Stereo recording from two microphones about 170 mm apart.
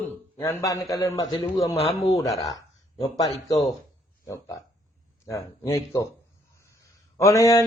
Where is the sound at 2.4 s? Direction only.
20° left (ahead or behind).